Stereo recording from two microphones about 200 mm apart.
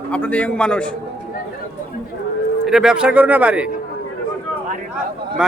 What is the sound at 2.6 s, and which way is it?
Speech, 5° right (ahead or behind).